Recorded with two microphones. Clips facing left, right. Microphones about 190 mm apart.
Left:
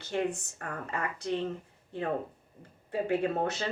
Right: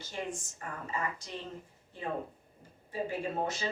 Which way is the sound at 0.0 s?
65° left (ahead or behind).